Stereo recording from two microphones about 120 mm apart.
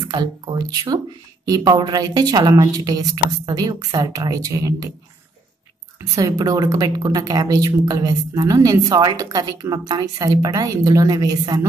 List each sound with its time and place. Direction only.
0.1 s a woman's voice: 35° right (ahead or behind)
5.9 s a woman's voice: 30° right (ahead or behind)